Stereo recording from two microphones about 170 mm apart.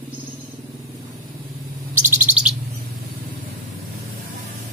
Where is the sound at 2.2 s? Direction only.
5° right (ahead or behind).